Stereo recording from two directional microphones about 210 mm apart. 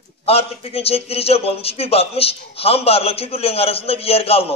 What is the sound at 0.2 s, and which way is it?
A man's voice, 30° left (ahead or behind).